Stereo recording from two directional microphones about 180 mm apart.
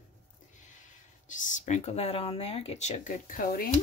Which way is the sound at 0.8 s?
45° left (ahead or behind).